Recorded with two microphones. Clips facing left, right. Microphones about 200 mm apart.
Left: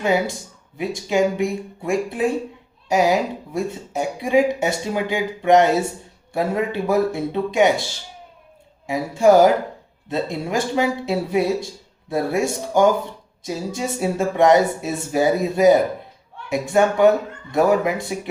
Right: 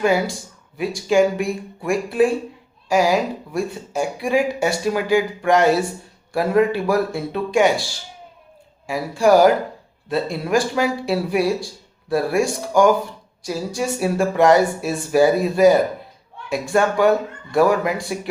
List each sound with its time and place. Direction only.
0.0 s speech: 20° left (ahead or behind)